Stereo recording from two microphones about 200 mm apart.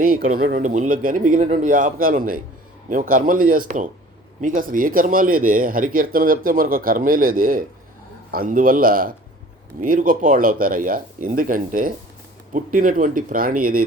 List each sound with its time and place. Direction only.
0.2 s speech: 90° right
0.4 s a man's voice: 40° right (ahead or behind)